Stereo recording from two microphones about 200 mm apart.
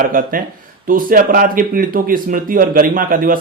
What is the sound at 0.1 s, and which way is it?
A man's voice, 45° right (ahead or behind).